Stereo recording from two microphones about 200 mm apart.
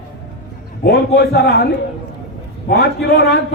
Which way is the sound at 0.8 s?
55° left (ahead or behind).